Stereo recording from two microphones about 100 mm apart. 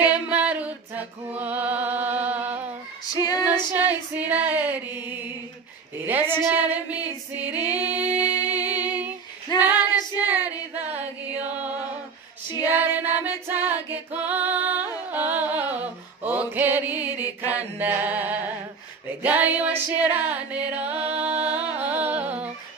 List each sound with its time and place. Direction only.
0.0 s music: 15° right (ahead or behind)
3.1 s female singing: 40° left (ahead or behind)
3.4 s female singing: 20° right (ahead or behind)
6.0 s music: 20° right (ahead or behind)
8.7 s humming: 15° right (ahead or behind)
9.6 s female singing: 15° right (ahead or behind)
10.7 s music: 15° right (ahead or behind)
11.5 s female singing: 15° right (ahead or behind)
12.4 s female singing: 40° left (ahead or behind)
12.7 s female singing: 20° right (ahead or behind)
17.5 s a sound: 15° right (ahead or behind)
19.2 s music: 15° right (ahead or behind)